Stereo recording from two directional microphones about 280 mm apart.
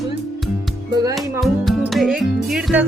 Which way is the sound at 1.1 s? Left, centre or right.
Centre.